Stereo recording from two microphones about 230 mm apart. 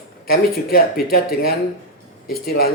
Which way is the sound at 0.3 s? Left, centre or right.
Left.